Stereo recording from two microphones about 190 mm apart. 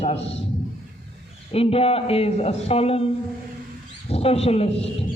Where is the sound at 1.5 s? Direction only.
30° left (ahead or behind).